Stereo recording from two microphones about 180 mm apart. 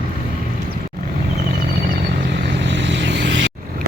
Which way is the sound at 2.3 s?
80° right.